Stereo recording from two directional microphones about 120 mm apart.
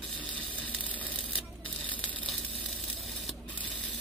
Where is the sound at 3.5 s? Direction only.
10° left (ahead or behind).